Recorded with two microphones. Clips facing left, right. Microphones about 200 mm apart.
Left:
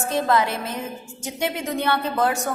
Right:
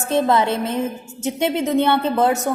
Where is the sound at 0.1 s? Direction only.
25° right (ahead or behind).